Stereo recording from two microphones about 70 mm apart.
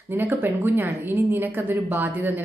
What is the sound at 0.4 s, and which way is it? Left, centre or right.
A woman's voice, right.